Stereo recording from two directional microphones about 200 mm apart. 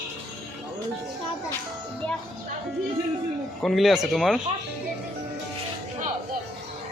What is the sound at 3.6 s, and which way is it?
Speech, centre (ahead or behind).